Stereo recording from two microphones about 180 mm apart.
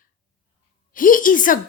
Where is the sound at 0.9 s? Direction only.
50° left (ahead or behind).